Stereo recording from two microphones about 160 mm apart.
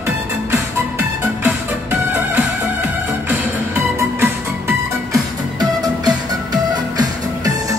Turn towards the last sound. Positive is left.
turn(degrees=-25)  # may be behind; listen again after turning